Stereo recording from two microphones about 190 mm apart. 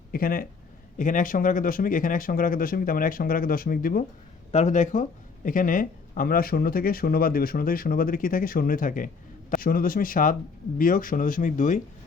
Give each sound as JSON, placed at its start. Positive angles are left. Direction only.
{"t": 0.1, "sound": "speech", "side_deg": 50}